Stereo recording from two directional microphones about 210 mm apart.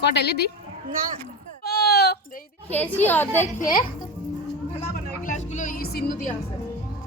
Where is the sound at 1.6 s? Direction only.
50° left (ahead or behind).